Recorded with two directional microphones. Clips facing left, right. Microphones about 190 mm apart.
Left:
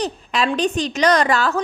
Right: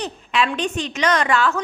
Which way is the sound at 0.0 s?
35° left (ahead or behind).